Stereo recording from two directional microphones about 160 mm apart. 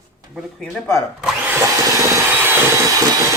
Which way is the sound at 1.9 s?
20° right (ahead or behind).